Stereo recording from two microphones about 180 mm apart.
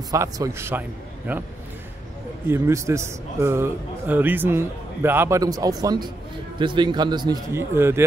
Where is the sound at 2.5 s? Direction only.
15° right (ahead or behind).